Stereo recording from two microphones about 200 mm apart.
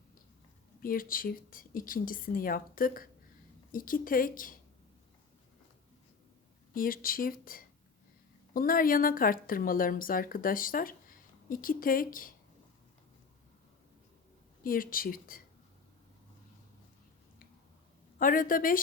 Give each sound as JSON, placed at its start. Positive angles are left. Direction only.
{"t": 0.8, "sound": "a woman's voice", "side_deg": 45}
{"t": 6.7, "sound": "a woman's voice", "side_deg": 45}
{"t": 14.6, "sound": "a woman's voice", "side_deg": 45}
{"t": 18.2, "sound": "a woman's voice", "side_deg": 45}